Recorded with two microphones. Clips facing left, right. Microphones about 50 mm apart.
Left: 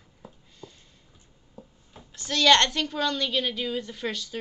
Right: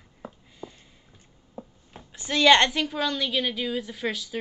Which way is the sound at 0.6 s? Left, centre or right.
Right.